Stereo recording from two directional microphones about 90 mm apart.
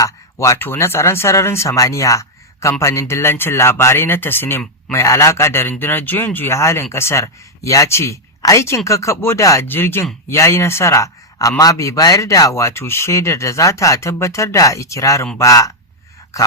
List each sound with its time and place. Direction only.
0.0 s a man's voice: 35° left (ahead or behind)
9.6 s a man's voice: 25° left (ahead or behind)